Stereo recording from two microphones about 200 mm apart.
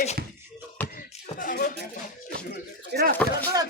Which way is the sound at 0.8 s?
10° left (ahead or behind).